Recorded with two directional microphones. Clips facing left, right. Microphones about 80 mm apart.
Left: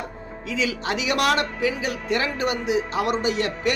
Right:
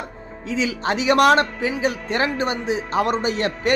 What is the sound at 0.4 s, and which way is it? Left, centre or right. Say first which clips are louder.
Speech: right 3 dB; right.